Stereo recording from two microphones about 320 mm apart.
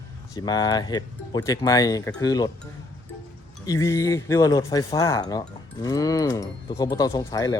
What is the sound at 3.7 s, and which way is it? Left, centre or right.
Speech, centre.